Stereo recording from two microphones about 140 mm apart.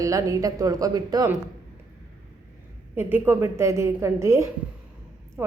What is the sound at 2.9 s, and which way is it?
A woman's voice, 15° right (ahead or behind).